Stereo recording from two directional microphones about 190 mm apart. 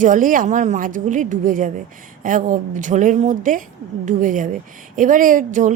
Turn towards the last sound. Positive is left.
turn(degrees=-40)  # may be behind; listen again after turning